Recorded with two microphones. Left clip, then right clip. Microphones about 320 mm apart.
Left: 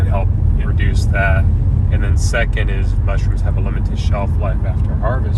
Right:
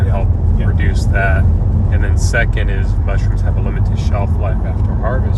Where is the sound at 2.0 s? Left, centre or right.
Left.